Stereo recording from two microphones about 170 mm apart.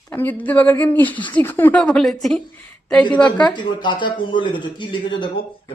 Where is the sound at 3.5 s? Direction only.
25° left (ahead or behind).